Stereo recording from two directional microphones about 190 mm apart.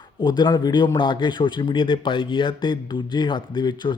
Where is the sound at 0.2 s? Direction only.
25° left (ahead or behind).